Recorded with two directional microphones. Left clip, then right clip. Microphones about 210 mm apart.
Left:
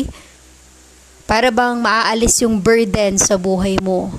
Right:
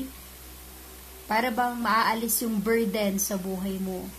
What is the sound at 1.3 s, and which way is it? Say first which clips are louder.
A woman's voice: left 12 dB; 45° left (ahead or behind).